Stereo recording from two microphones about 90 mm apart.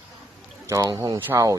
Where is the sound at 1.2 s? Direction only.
35° right (ahead or behind).